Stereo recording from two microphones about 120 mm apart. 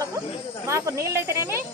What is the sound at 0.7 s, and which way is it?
Speech, 25° right (ahead or behind).